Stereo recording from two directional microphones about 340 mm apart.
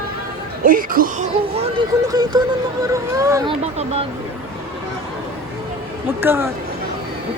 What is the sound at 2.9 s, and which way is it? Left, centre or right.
Speech, centre.